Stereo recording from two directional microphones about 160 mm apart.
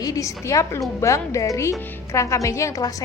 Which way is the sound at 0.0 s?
20° left (ahead or behind).